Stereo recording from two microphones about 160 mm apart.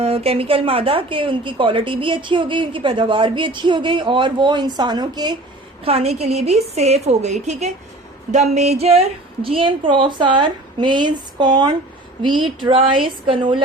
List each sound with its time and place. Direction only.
0.0 s speech: 40° right (ahead or behind)
5.8 s a woman's voice: 40° right (ahead or behind)